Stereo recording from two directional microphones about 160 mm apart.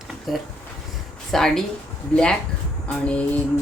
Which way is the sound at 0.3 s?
Centre (ahead or behind).